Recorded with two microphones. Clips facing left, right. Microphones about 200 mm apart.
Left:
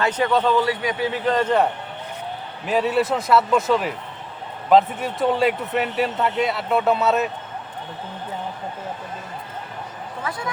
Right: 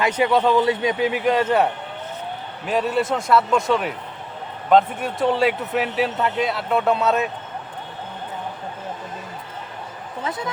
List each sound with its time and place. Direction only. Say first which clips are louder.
0.0 s a man's voice: right 1 dB; 10° right (ahead or behind)
0.6 s a man's voice: right 3 dB; 25° right (ahead or behind); by 7.3 s centre (ahead or behind)
10.2 s speech: right 2 dB; 20° right (ahead or behind)